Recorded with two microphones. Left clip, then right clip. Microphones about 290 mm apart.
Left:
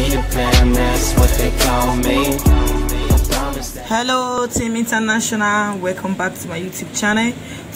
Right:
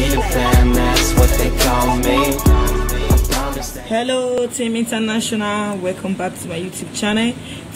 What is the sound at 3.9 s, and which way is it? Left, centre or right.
Speech, left.